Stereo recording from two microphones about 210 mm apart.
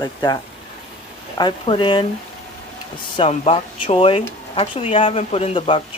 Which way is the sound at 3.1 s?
25° left (ahead or behind).